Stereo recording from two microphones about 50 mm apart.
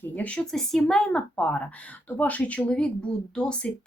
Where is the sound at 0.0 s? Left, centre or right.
Left.